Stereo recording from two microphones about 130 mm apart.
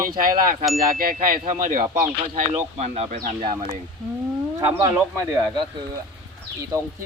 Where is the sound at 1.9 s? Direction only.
75° right (ahead or behind); by 3.2 s 60° right (ahead or behind).